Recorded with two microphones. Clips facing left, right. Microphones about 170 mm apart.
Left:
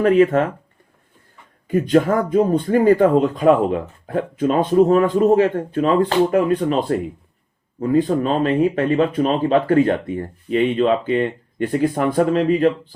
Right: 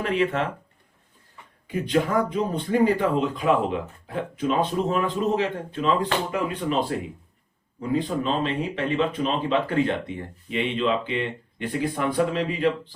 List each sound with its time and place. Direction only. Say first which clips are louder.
0.0 s speech: left 10 dB; 45° left (ahead or behind)
1.6 s speech: left 8 dB; 50° left (ahead or behind)